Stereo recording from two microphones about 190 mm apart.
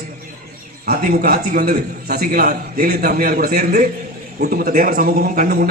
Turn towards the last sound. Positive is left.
turn(degrees=-50)  # may be behind; listen again after turning